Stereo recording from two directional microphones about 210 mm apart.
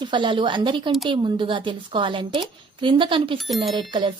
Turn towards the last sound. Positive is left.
turn(degrees=-20)  # may be behind; listen again after turning